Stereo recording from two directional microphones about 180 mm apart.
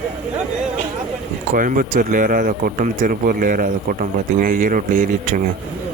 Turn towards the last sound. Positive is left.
turn(degrees=-50)  # may be behind; listen again after turning